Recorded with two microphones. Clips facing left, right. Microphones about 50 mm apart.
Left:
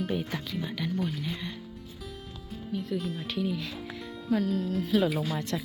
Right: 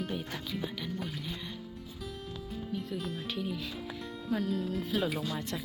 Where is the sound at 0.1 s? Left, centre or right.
Left.